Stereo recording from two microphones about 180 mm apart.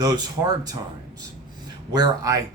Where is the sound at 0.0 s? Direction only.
20° right (ahead or behind).